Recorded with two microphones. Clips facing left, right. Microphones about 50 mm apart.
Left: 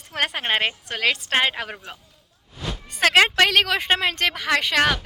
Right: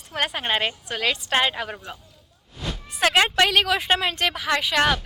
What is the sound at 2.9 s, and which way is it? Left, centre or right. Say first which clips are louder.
A woman's voice: left 2 dB; left.